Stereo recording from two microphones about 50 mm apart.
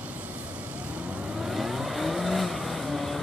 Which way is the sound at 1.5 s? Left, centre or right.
Centre.